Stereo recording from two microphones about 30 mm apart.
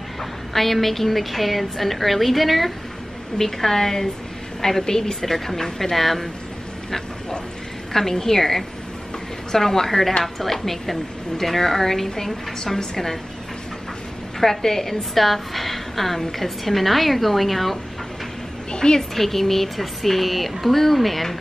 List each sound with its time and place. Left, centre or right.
0.2 s a woman's voice: centre
3.3 s a woman's voice: centre
5.2 s a woman's voice: centre
7.9 s a woman's voice: centre
14.4 s a woman's voice: centre
18.7 s a sound: left
18.9 s a woman's voice: centre